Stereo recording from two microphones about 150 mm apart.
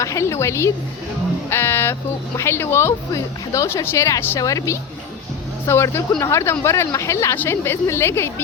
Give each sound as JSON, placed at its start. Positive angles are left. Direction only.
{"t": 0.0, "sound": "a woman's voice", "side_deg": 20}